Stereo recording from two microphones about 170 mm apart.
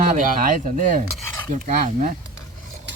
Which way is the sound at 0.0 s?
50° right (ahead or behind).